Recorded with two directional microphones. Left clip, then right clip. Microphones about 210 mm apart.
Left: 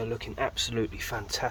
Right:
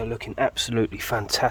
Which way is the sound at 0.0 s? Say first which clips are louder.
Right 6 dB; 55° right (ahead or behind).